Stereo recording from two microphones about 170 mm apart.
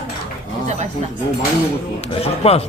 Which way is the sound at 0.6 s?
40° right (ahead or behind).